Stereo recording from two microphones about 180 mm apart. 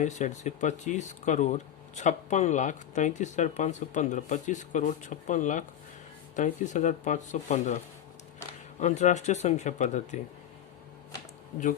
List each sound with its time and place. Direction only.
0.0 s speech: 40° left (ahead or behind)
8.8 s speech: 40° left (ahead or behind)